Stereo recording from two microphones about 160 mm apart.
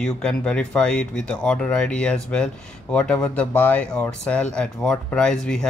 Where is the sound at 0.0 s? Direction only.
5° left (ahead or behind).